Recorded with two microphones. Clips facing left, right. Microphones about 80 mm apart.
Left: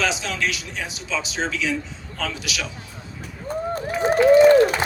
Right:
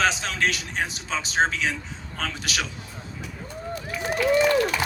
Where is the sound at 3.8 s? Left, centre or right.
Left.